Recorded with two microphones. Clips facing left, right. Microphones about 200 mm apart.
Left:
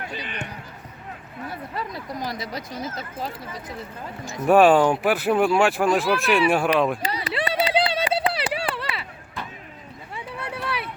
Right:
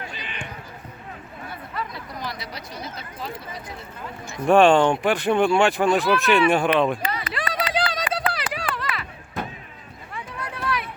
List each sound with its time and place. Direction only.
1.5 s speech: 40° left (ahead or behind)
4.4 s speech: 5° left (ahead or behind)
7.0 s run: 35° left (ahead or behind)
10.4 s a sound: 30° left (ahead or behind)